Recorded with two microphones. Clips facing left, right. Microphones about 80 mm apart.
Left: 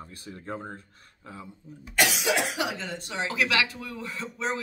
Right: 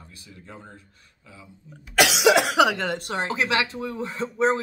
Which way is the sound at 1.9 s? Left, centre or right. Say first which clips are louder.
Right 7 dB; right.